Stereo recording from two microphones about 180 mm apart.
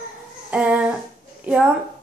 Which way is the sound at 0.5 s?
5° right (ahead or behind).